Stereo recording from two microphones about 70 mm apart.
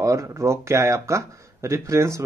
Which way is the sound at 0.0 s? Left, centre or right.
Right.